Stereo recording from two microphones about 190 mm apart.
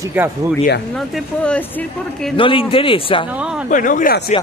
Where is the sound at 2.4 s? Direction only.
25° left (ahead or behind).